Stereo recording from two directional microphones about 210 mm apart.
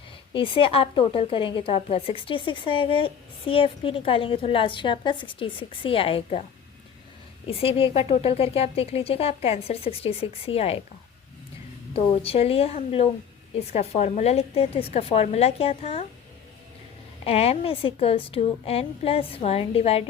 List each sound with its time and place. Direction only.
0.3 s a woman's voice: 25° left (ahead or behind)
7.6 s a woman's voice: 25° left (ahead or behind)
11.9 s a woman's voice: 25° left (ahead or behind)
17.2 s a woman's voice: 30° left (ahead or behind)